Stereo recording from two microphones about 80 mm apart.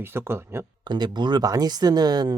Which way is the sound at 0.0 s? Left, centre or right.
Right.